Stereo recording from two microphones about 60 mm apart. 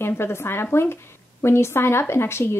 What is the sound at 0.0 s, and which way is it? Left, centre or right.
A woman's voice, left.